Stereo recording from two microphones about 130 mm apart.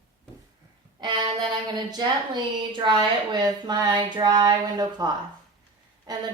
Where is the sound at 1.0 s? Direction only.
35° right (ahead or behind).